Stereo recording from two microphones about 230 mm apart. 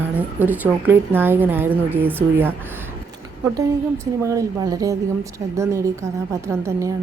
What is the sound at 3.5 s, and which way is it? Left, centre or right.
A woman's voice, centre.